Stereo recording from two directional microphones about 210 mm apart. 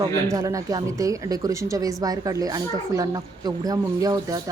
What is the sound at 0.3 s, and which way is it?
A woman's voice, 15° right (ahead or behind).